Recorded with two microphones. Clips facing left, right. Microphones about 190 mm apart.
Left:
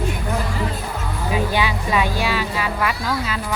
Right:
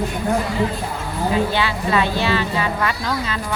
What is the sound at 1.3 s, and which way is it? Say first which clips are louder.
Music: left 1 dB; 15° left (ahead or behind).